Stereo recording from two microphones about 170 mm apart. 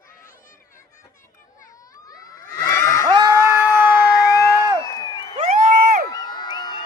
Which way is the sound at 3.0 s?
25° right (ahead or behind).